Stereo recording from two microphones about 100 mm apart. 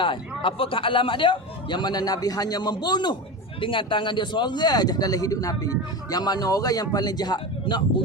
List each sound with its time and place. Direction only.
0.0 s a man's voice: 60° left (ahead or behind)
3.6 s a man's voice: 55° left (ahead or behind)